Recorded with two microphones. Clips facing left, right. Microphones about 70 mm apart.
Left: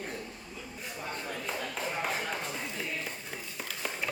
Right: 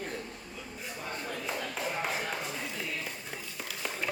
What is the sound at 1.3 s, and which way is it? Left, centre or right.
Chop, centre.